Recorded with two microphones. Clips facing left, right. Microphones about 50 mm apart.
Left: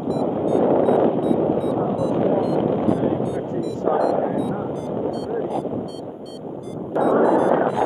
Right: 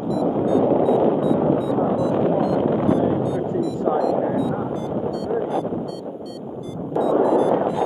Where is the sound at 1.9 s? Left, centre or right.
Centre.